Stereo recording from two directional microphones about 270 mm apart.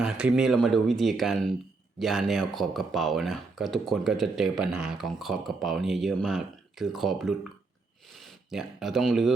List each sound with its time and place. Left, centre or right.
0.0 s speech: centre